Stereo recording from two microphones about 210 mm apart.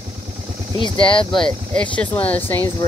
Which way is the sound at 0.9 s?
25° left (ahead or behind).